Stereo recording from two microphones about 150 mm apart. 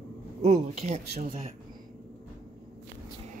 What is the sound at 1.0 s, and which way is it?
Speech, 75° right (ahead or behind).